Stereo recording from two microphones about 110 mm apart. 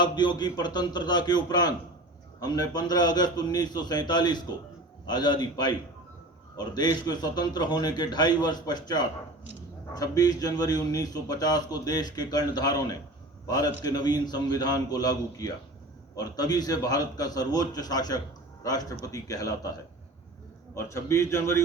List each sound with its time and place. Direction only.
0.0 s a man's voice: 40° left (ahead or behind)
20.7 s a man's voice: 25° left (ahead or behind)